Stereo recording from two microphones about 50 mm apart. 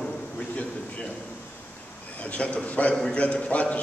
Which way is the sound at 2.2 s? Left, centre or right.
Left.